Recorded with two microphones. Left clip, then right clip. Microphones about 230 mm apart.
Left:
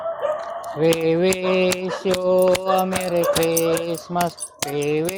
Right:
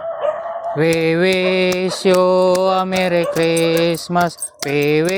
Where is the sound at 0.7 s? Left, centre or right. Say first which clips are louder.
Right 2 dB; right.